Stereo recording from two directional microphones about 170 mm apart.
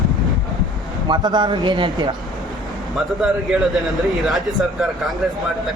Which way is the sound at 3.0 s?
Centre (ahead or behind).